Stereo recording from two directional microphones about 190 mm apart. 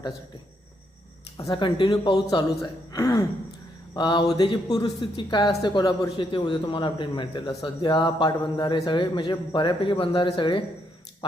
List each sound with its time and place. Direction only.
1.4 s a woman's voice: 25° left (ahead or behind)